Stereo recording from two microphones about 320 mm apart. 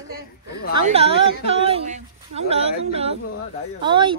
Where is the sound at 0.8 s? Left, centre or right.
Centre.